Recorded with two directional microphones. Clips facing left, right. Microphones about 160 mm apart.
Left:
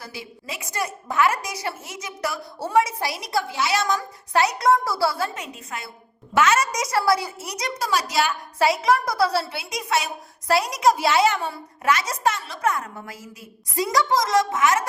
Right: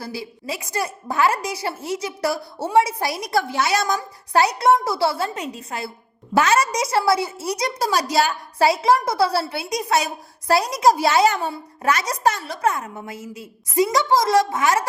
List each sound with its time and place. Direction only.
0.0 s a woman's voice: 35° right (ahead or behind)
3.0 s a woman's voice: 45° right (ahead or behind); by 9.4 s 25° right (ahead or behind)
9.5 s a woman's voice: 40° right (ahead or behind)
12.7 s a woman's voice: 20° right (ahead or behind)